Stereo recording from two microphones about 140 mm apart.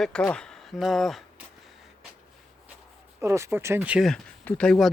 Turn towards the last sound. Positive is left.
turn(degrees=5)  # may be behind; listen again after turning